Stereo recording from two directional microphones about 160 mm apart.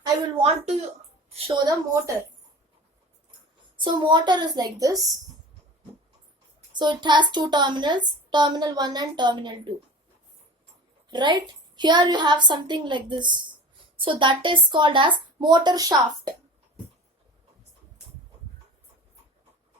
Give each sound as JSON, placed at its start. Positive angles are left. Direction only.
{"t": 0.4, "sound": "speech", "side_deg": -40}
{"t": 1.5, "sound": "a child's voice", "side_deg": -20}
{"t": 3.8, "sound": "a child's voice", "side_deg": -30}
{"t": 6.7, "sound": "a child's voice", "side_deg": -30}
{"t": 11.1, "sound": "a child's voice", "side_deg": -30}